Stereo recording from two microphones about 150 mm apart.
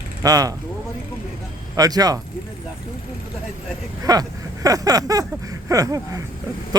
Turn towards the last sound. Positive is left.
turn(degrees=-25)  # may be behind; listen again after turning